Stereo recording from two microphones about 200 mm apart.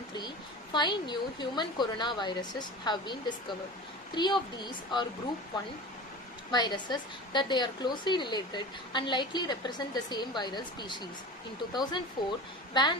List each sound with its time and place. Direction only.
0.7 s a woman's voice: 20° left (ahead or behind)
6.5 s a woman's voice: 20° left (ahead or behind)